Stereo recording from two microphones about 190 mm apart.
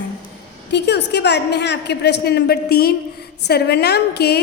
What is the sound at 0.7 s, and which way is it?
A woman's voice, 60° left (ahead or behind).